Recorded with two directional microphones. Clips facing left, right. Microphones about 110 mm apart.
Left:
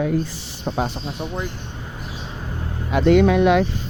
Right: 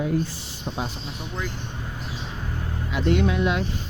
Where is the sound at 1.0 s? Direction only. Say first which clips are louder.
Left 6 dB; 35° left (ahead or behind).